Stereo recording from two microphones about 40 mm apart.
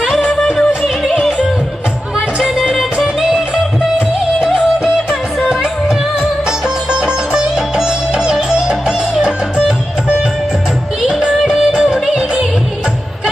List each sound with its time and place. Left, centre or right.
2.3 s music: centre
2.7 s music: centre
3.2 s music: centre
5.5 s music: centre
11.1 s music: centre